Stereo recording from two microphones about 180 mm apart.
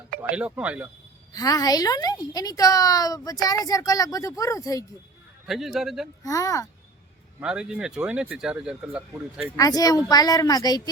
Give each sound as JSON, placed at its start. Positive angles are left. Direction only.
{"t": 0.2, "sound": "speech", "side_deg": -5}
{"t": 1.3, "sound": "a woman's voice", "side_deg": 20}
{"t": 5.5, "sound": "speech", "side_deg": 0}
{"t": 6.2, "sound": "speech", "side_deg": 20}
{"t": 7.3, "sound": "speech", "side_deg": -5}
{"t": 9.6, "sound": "a woman's voice", "side_deg": 20}